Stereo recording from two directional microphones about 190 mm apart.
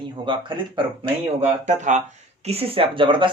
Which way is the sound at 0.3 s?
25° right (ahead or behind).